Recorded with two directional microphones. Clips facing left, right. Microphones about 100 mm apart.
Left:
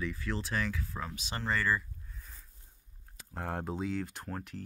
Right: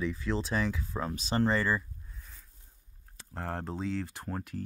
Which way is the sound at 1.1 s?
35° right (ahead or behind).